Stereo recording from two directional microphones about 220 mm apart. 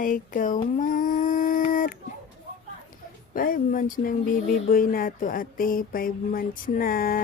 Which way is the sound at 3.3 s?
40° left (ahead or behind).